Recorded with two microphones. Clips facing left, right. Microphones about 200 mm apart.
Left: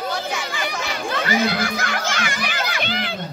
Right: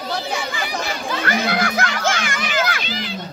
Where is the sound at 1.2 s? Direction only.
55° right (ahead or behind).